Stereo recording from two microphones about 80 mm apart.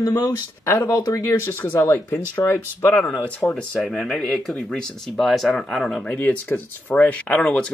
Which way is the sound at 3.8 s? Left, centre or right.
Centre.